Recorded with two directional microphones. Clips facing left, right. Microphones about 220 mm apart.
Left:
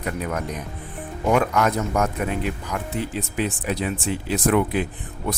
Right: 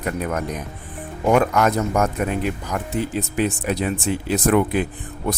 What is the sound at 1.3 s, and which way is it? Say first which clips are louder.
Speech: right 3 dB; 45° right (ahead or behind).